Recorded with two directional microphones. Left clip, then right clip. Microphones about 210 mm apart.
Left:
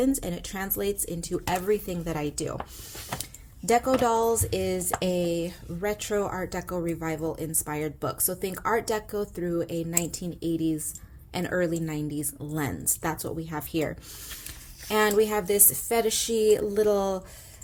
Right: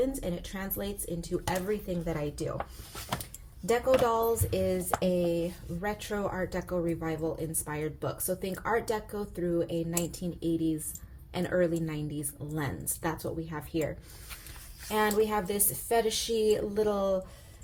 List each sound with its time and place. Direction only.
0.0 s speech: 35° left (ahead or behind)
3.7 s speech: 35° left (ahead or behind)
14.8 s speech: 40° left (ahead or behind)